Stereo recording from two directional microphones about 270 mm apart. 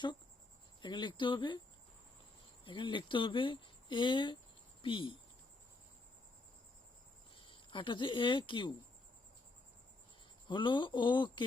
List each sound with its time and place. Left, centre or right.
0.8 s speech: centre
2.6 s speech: centre
7.3 s speech: centre
10.5 s speech: centre